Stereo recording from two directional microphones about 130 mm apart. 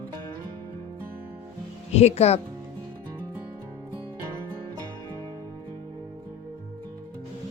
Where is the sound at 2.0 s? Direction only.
55° left (ahead or behind).